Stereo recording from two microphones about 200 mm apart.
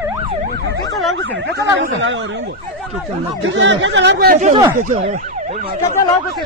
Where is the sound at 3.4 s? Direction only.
70° right (ahead or behind).